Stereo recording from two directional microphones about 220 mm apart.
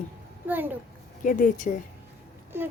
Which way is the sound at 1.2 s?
35° left (ahead or behind).